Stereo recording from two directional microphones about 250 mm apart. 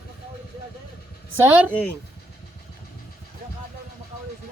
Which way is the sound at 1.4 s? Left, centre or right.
Centre.